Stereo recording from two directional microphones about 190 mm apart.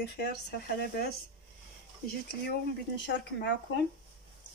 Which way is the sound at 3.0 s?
70° left (ahead or behind).